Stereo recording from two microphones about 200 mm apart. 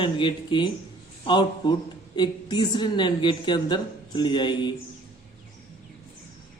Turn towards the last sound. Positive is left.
turn(degrees=25)  # may be behind; listen again after turning